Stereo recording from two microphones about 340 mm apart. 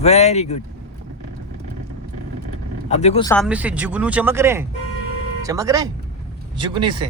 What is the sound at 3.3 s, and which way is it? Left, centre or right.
Speech, centre.